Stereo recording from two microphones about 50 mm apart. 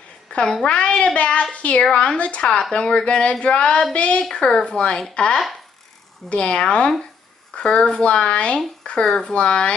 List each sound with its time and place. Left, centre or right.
0.7 s a woman's voice: left